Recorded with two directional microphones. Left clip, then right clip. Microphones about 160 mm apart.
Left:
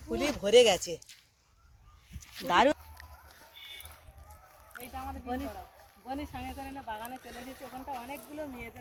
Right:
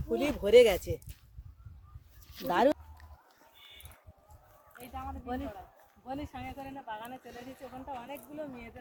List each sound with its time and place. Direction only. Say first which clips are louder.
0.1 s speech: right 1 dB; 55° right (ahead or behind)
2.5 s speech: left 2 dB; 45° right (ahead or behind)
4.7 s speech: left 1 dB; 5° left (ahead or behind)
7.3 s speech: left 1 dB; 5° right (ahead or behind)